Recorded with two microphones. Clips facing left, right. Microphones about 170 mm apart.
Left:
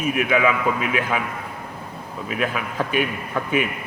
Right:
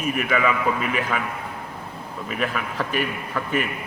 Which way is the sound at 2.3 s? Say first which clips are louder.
Left 2 dB; 5° left (ahead or behind).